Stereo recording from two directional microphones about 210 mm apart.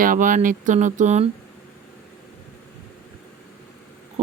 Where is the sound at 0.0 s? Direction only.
40° right (ahead or behind).